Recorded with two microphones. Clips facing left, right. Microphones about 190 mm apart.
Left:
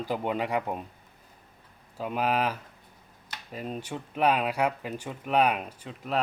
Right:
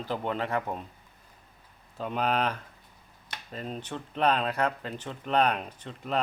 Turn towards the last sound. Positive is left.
turn(degrees=5)  # may be behind; listen again after turning